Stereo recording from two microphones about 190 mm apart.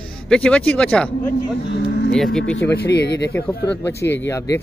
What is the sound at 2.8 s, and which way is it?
Speech, 60° left (ahead or behind).